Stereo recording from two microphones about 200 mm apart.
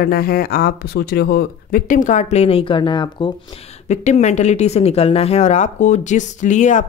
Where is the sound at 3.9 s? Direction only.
35° left (ahead or behind).